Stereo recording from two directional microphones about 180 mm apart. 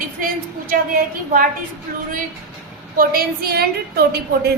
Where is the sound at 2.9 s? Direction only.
55° right (ahead or behind).